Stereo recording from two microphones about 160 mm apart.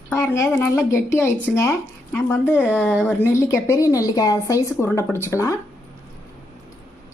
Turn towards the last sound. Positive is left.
turn(degrees=20)  # may be behind; listen again after turning